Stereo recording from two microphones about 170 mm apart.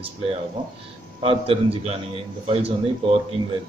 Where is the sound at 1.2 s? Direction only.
35° right (ahead or behind).